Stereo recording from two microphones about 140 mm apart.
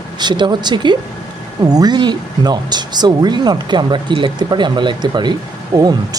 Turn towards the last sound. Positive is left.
turn(degrees=-25)  # may be behind; listen again after turning